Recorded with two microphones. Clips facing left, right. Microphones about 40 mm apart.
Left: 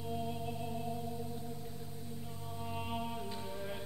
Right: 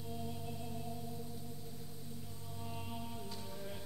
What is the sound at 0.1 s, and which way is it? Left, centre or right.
Music, left.